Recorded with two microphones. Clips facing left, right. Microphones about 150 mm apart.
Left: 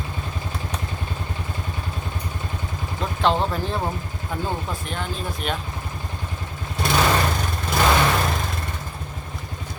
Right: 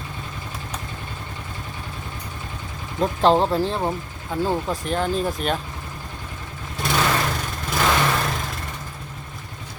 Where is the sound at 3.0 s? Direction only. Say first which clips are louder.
Right 4 dB; 35° right (ahead or behind).